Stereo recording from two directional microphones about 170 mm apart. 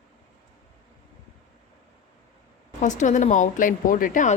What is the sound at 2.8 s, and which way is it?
Speech, 45° left (ahead or behind).